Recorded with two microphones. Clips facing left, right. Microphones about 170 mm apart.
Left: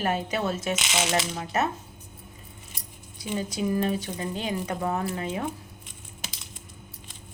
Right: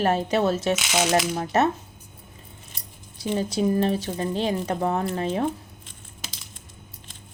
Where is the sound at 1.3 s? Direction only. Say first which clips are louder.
Right 6 dB; 40° right (ahead or behind).